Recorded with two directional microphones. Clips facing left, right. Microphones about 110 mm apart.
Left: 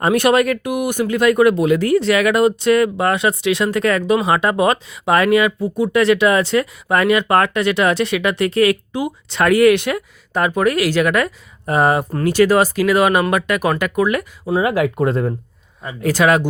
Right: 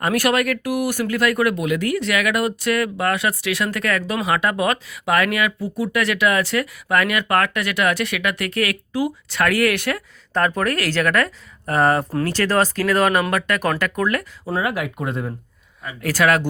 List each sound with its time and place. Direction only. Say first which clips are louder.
0.0 s speech: left 5 dB; 25° left (ahead or behind)
14.6 s speech: left 7 dB; 25° left (ahead or behind)
15.0 s speech: left 7 dB; 40° left (ahead or behind)
15.8 s speech: left 4 dB; 25° left (ahead or behind)